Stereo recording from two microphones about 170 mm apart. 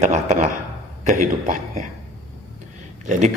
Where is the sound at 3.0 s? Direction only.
45° right (ahead or behind).